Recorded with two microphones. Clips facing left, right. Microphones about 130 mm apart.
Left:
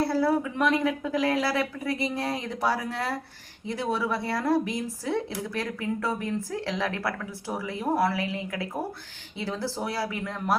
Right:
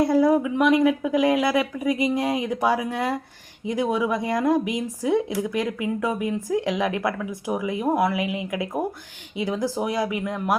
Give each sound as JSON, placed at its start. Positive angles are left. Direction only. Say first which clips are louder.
{"t": 0.0, "sound": "speech", "louder": "right 6 dB", "side_deg": -15}